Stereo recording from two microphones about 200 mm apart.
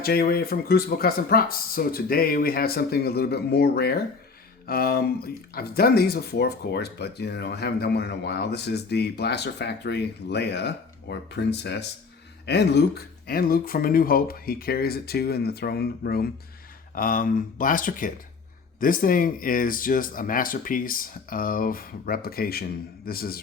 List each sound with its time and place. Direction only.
0.0 s speech: 50° left (ahead or behind)